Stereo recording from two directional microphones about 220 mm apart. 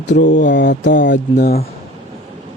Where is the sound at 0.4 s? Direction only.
55° left (ahead or behind).